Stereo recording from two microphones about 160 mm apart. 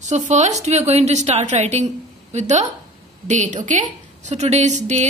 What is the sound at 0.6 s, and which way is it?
A woman's voice, 40° right (ahead or behind).